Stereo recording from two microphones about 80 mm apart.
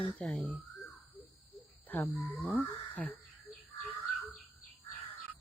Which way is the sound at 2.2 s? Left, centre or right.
Centre.